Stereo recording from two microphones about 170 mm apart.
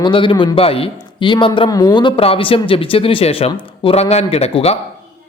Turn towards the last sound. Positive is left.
turn(degrees=35)  # may be behind; listen again after turning